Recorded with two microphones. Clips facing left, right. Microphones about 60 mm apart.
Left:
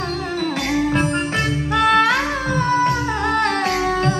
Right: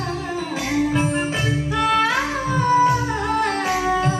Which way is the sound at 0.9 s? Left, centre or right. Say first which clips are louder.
Left 2 dB; left.